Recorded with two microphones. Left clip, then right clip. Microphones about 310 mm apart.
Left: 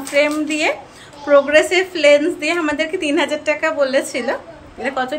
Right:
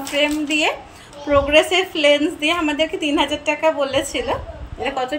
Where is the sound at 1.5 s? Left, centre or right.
Centre.